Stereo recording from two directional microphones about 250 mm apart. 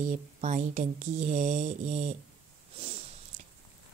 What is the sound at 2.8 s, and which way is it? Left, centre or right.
Snort, right.